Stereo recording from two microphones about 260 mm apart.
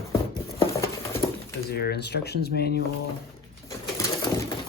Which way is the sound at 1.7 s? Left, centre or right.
Left.